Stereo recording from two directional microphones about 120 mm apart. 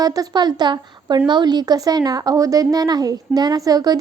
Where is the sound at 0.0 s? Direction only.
30° right (ahead or behind).